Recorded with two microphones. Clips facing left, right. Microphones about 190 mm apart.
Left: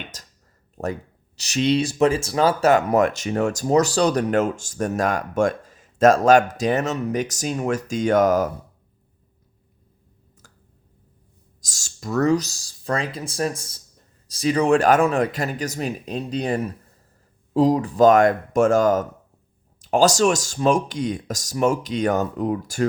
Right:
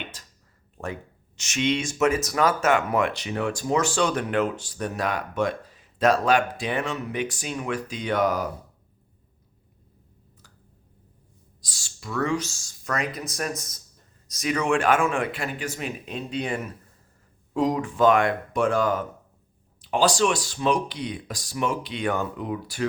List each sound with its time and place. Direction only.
0.1 s a sound: 40° left (ahead or behind)
1.4 s speech: 35° left (ahead or behind)
11.6 s speech: 45° left (ahead or behind)